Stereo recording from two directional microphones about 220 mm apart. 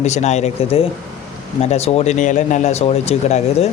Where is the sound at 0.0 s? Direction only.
30° left (ahead or behind).